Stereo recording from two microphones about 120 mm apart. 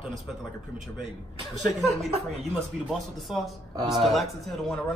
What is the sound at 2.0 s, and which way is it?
Speech, 60° right (ahead or behind).